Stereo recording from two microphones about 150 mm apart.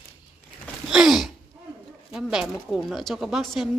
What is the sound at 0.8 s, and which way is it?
Gasp, 5° right (ahead or behind).